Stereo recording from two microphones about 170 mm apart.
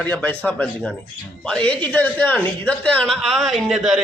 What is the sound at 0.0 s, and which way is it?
A man's voice, 10° left (ahead or behind).